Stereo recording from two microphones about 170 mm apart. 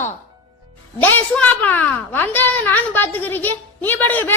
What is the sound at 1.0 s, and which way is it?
A woman's voice, 10° left (ahead or behind).